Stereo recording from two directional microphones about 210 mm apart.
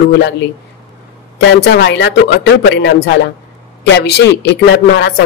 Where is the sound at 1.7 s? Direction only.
55° left (ahead or behind).